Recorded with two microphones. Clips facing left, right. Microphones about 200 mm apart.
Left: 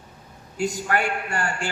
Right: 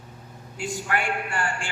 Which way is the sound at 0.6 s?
40° left (ahead or behind).